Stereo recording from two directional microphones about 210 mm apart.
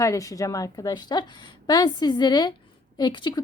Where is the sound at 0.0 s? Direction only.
15° left (ahead or behind).